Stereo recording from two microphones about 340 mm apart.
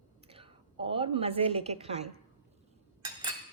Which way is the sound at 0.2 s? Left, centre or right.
Centre.